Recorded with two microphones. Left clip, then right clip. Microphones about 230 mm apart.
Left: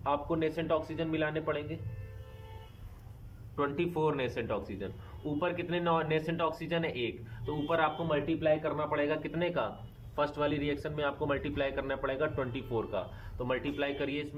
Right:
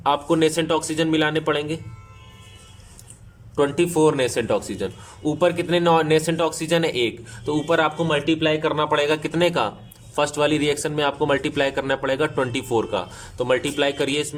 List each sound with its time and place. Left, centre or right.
0.0 s a man's voice: right
3.5 s a man's voice: right